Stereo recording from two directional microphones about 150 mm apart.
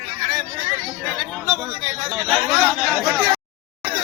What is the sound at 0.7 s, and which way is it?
Chatter, 30° right (ahead or behind).